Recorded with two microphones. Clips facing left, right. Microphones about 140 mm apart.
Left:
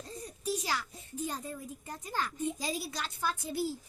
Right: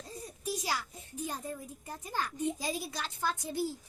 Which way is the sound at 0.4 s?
15° right (ahead or behind).